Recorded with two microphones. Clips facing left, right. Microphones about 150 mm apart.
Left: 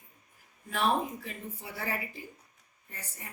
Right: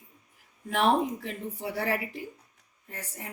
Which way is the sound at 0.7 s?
75° right (ahead or behind).